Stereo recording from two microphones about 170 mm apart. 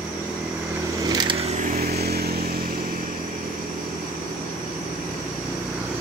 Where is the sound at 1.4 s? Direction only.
45° right (ahead or behind); by 2.5 s 65° right (ahead or behind).